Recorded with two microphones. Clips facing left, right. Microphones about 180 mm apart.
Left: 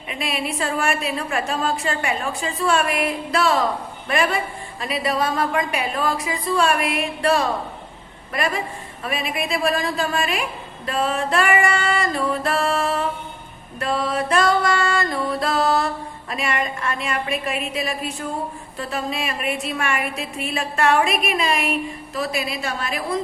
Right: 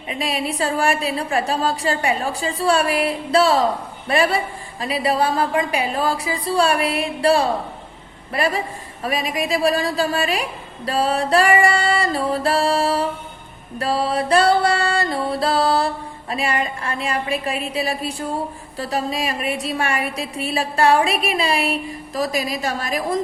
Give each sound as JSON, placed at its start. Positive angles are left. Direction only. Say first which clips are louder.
{"t": 0.1, "sound": "a woman's voice", "louder": "right 2 dB", "side_deg": -35}